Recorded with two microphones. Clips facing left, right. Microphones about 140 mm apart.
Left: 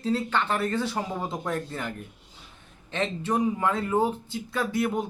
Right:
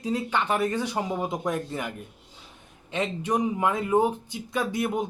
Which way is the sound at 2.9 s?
15° right (ahead or behind).